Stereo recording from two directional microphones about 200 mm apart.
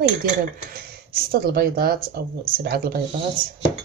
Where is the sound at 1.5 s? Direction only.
50° right (ahead or behind).